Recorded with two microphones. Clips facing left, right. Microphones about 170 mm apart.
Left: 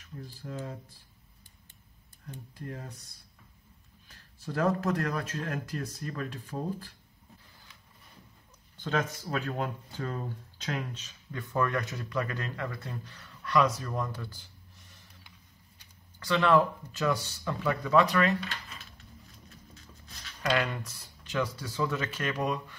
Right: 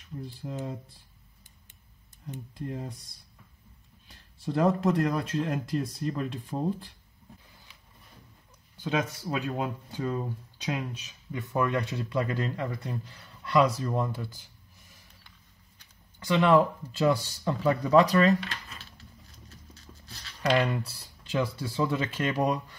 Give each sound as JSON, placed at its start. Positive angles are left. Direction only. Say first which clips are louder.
{"t": 0.4, "sound": "speech", "louder": "right 3 dB", "side_deg": -20}
{"t": 2.2, "sound": "speech", "louder": "right 5 dB", "side_deg": -20}
{"t": 4.1, "sound": "speech", "louder": "right 6 dB", "side_deg": -15}
{"t": 8.7, "sound": "speech", "louder": "right 2 dB", "side_deg": -10}
{"t": 16.3, "sound": "speech", "louder": "right 2 dB", "side_deg": -20}
{"t": 19.7, "sound": "a sound", "louder": "right 2 dB", "side_deg": -35}
{"t": 20.6, "sound": "speech", "louder": "right 5 dB", "side_deg": -30}